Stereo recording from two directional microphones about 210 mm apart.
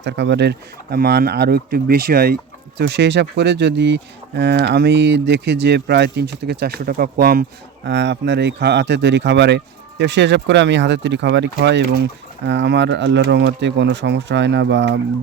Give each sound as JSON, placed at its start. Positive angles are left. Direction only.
{"t": 0.0, "sound": "speech", "side_deg": -55}
{"t": 7.9, "sound": "speech", "side_deg": -55}